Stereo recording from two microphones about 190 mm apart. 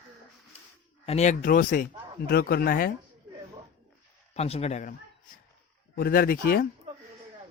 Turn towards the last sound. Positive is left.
turn(degrees=50)  # may be behind; listen again after turning